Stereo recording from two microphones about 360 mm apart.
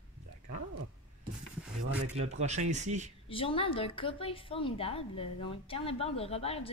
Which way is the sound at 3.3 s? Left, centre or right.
Centre.